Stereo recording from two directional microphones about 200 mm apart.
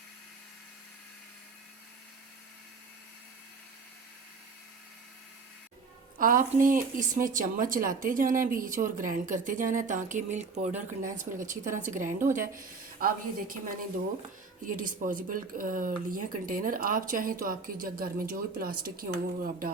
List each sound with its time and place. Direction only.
6.1 s speech: 40° right (ahead or behind)